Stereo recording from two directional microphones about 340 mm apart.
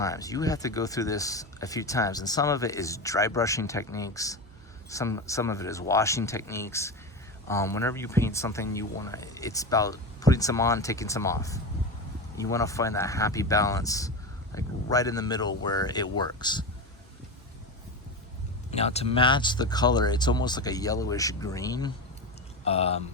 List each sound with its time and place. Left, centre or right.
0.0 s speech: centre
18.7 s speech: centre